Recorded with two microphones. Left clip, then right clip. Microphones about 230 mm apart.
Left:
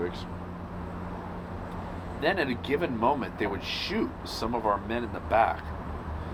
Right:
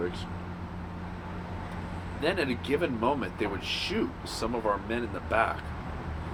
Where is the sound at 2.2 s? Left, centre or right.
Left.